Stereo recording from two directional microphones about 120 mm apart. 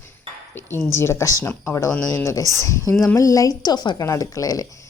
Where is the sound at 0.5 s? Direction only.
20° left (ahead or behind).